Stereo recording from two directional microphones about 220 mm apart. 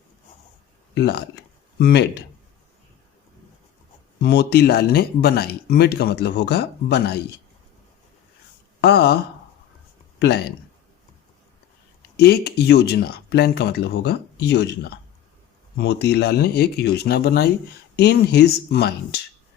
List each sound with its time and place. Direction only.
0.9 s speech: 50° left (ahead or behind)
4.2 s speech: 45° left (ahead or behind)
8.8 s speech: 45° left (ahead or behind)
10.2 s speech: 50° left (ahead or behind)
12.1 s speech: 50° left (ahead or behind)